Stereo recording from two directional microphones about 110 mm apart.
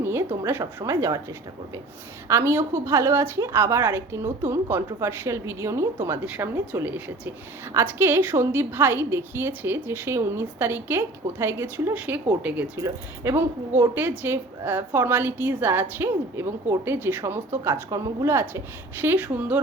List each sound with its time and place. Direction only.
0.0 s a sound: 20° right (ahead or behind)
0.4 s a woman's voice: 25° right (ahead or behind)
6.2 s a woman's voice: 15° right (ahead or behind)
12.7 s a woman's voice: 25° right (ahead or behind)